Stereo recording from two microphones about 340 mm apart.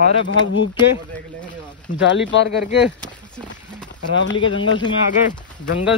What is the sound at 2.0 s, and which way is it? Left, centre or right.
Speech, left.